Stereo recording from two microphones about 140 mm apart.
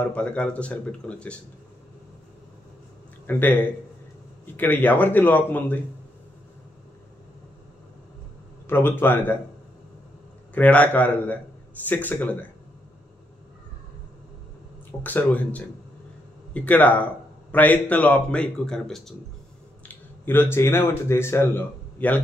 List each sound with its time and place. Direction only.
0.0 s speech: 10° left (ahead or behind)
3.3 s a man's voice: 15° left (ahead or behind)
4.6 s speech: 15° left (ahead or behind)
8.6 s speech: 15° left (ahead or behind)
10.5 s speech: 10° left (ahead or behind)
14.9 s speech: 10° left (ahead or behind)
19.9 s speech: 15° left (ahead or behind)